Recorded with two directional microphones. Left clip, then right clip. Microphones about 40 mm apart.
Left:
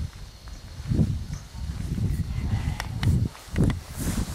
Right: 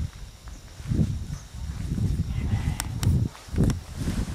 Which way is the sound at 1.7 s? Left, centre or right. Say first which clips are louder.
Right 1 dB; centre.